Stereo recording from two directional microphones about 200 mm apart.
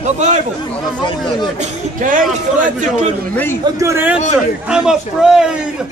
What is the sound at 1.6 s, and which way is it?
Speech, 40° right (ahead or behind).